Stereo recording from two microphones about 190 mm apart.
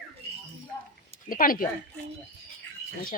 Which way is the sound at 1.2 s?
50° left (ahead or behind).